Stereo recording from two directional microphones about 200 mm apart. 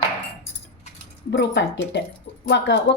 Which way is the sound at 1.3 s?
60° left (ahead or behind).